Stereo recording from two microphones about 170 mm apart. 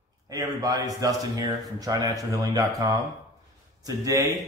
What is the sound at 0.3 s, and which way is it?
A man's voice, 20° right (ahead or behind).